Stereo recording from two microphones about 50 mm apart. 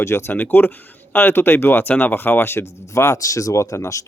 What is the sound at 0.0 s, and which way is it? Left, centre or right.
Speech, left.